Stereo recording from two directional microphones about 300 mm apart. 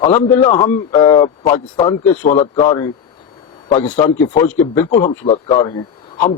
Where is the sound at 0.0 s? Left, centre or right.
Centre.